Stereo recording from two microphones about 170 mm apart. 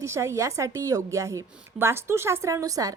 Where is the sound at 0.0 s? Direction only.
15° right (ahead or behind).